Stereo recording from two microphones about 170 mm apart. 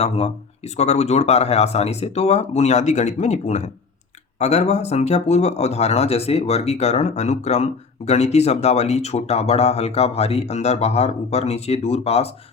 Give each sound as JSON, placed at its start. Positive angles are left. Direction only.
{"t": 0.0, "sound": "speech", "side_deg": 40}